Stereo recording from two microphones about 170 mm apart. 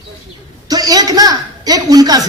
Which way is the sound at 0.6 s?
20° right (ahead or behind).